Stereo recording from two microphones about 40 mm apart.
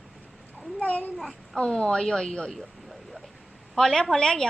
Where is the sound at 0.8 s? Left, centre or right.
Left.